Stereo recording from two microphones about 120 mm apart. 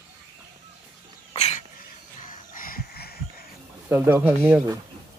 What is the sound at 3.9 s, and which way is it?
Speech, 15° right (ahead or behind).